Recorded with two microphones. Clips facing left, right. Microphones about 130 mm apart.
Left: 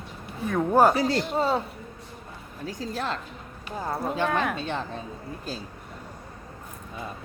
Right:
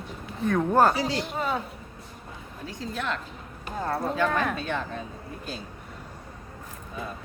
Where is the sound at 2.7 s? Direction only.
40° left (ahead or behind).